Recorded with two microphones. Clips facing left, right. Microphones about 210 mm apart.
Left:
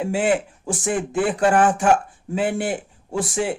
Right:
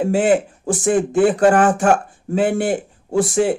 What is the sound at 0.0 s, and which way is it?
Speech, 40° right (ahead or behind).